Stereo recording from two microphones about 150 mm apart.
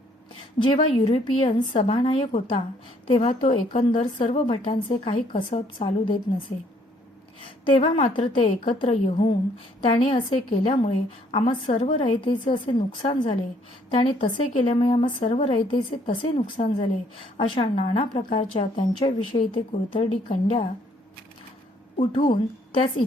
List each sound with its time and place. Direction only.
0.6 s a woman's voice: 35° left (ahead or behind)
7.4 s a woman's voice: 35° left (ahead or behind)
16.6 s a woman's voice: 50° left (ahead or behind)
17.3 s a woman's voice: 35° left (ahead or behind)
22.1 s a woman's voice: 35° left (ahead or behind)